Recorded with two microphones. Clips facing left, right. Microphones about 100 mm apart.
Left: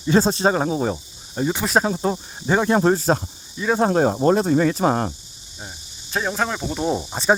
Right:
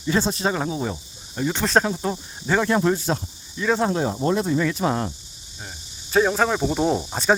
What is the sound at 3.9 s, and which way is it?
Speech, 50° left (ahead or behind).